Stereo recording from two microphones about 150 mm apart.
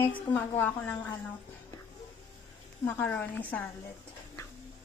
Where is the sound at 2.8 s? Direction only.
10° left (ahead or behind).